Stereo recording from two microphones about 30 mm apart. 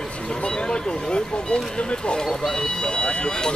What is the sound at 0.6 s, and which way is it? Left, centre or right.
Speech, left.